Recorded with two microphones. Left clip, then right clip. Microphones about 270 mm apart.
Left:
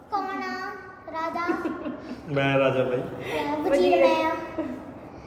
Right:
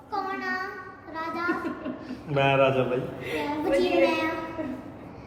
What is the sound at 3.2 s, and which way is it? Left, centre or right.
Speech, centre.